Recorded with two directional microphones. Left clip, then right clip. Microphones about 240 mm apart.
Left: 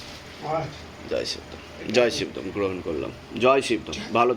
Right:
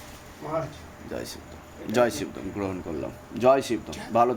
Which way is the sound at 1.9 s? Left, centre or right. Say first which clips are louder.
Left 2 dB; right.